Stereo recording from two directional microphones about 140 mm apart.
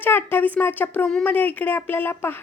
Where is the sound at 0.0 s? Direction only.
15° left (ahead or behind).